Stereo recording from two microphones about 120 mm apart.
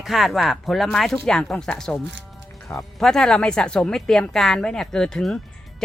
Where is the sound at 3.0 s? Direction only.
5° left (ahead or behind).